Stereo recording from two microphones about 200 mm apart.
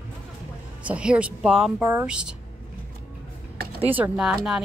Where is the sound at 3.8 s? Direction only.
10° right (ahead or behind).